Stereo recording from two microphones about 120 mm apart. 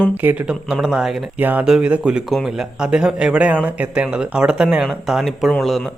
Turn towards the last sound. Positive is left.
turn(degrees=0)  # may be behind; listen again after turning